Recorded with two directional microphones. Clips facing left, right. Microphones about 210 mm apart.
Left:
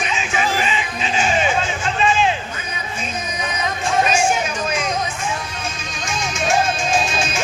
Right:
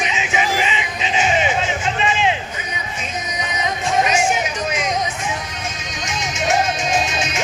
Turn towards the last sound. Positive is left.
turn(degrees=-20)  # may be behind; listen again after turning